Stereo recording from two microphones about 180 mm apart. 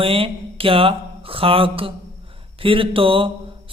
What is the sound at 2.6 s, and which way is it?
Speech, 30° right (ahead or behind).